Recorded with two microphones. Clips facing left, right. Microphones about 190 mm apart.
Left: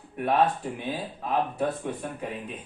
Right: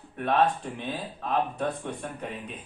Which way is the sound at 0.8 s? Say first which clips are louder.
Left 2 dB; 10° left (ahead or behind).